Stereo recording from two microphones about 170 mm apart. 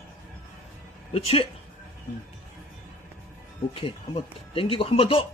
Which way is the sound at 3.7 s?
30° left (ahead or behind).